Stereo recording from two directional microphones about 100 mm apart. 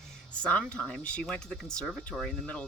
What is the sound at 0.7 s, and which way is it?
Speech, 10° left (ahead or behind).